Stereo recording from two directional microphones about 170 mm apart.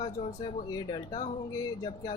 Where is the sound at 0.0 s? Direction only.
35° left (ahead or behind).